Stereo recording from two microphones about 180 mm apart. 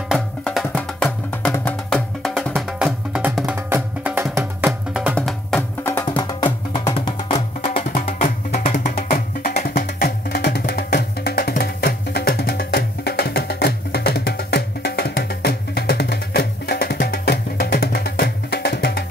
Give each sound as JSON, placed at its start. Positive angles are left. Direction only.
{"t": 0.1, "sound": "music", "side_deg": 0}
{"t": 4.6, "sound": "music", "side_deg": 0}
{"t": 6.0, "sound": "music", "side_deg": 25}
{"t": 8.2, "sound": "music", "side_deg": 50}
{"t": 9.1, "sound": "music", "side_deg": 60}